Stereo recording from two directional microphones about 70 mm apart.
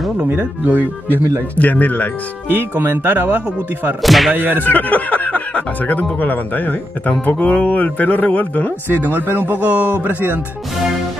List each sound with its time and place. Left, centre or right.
0.2 s speech: right
0.7 s speech: left
2.8 s speech: right
4.0 s music: centre
4.4 s speech: right
4.6 s speech: left
8.8 s speech: right